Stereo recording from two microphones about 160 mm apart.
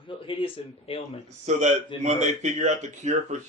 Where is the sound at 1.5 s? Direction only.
45° right (ahead or behind).